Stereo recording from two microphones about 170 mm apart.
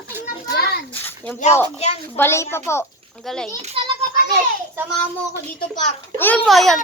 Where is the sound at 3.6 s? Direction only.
35° right (ahead or behind).